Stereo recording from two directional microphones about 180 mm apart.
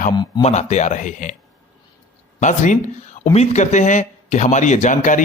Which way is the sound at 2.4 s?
45° left (ahead or behind).